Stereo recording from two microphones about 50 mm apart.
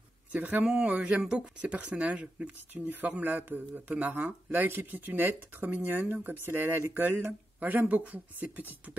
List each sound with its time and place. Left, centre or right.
0.3 s speech: right
0.7 s speech: centre
1.6 s speech: right
6.9 s speech: right